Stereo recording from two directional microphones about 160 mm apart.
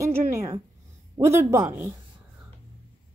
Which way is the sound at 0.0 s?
20° right (ahead or behind).